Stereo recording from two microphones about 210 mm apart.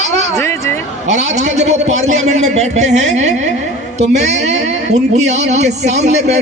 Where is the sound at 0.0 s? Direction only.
35° right (ahead or behind).